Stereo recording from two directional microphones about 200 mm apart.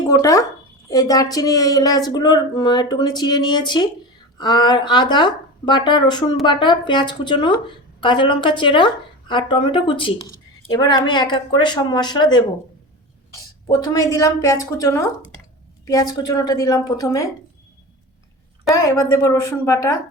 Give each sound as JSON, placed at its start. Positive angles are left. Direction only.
{"t": 0.1, "sound": "speech", "side_deg": 15}
{"t": 13.7, "sound": "speech", "side_deg": 20}
{"t": 18.7, "sound": "speech", "side_deg": 15}